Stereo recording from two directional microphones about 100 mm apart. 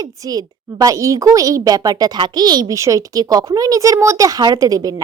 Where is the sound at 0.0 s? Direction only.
40° right (ahead or behind).